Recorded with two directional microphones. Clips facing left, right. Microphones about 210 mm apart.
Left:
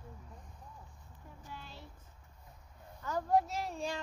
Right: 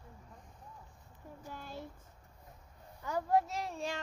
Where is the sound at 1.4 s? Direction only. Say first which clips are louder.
Right 5 dB; 50° right (ahead or behind).